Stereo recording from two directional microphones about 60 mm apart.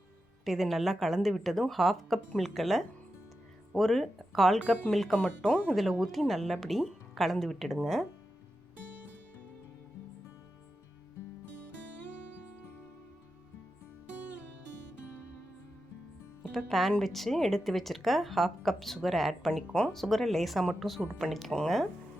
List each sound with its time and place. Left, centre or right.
0.4 s a woman's voice: centre
5.1 s speech: centre
5.7 s a woman's voice: centre
16.5 s a woman's voice: centre